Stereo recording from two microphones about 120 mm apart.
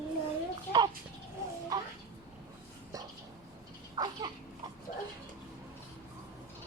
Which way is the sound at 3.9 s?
35° right (ahead or behind).